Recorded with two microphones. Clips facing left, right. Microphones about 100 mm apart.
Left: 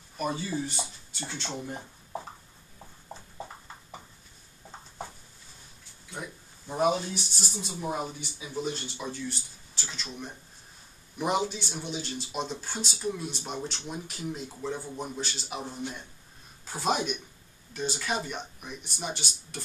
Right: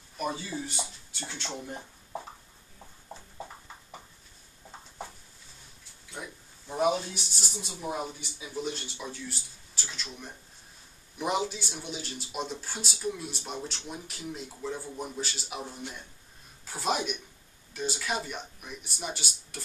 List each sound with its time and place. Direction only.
0.2 s speech: centre (ahead or behind)
4.6 s a sound: 10° left (ahead or behind)
6.1 s speech: 5° left (ahead or behind)
11.1 s speech: centre (ahead or behind)